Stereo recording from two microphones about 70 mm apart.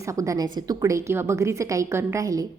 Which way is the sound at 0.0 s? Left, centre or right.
Right.